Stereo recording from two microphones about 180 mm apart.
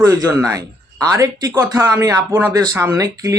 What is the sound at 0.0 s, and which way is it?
Speech, 20° right (ahead or behind).